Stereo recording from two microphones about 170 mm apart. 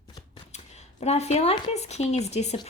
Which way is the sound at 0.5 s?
40° left (ahead or behind).